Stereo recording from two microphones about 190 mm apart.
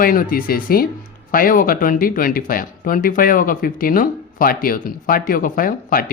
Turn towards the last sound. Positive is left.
turn(degrees=50)  # may be behind; listen again after turning